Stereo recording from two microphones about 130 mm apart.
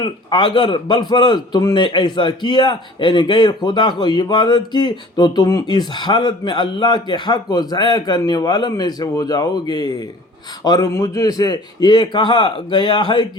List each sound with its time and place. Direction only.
0.0 s speech: 40° left (ahead or behind)